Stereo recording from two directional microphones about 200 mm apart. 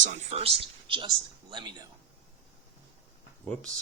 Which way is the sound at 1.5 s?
20° right (ahead or behind).